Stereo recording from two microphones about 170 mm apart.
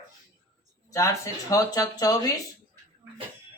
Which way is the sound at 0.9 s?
20° left (ahead or behind).